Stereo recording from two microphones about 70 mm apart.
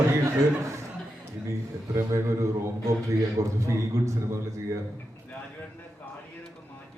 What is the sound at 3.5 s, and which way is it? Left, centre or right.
Speech, right.